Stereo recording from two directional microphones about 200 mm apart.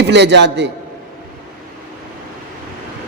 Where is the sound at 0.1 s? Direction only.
60° right (ahead or behind).